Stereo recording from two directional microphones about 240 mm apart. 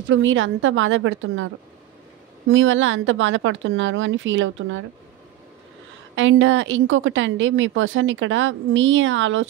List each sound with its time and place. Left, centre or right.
0.0 s a woman's voice: right
2.5 s a woman's voice: right
6.1 s a woman's voice: right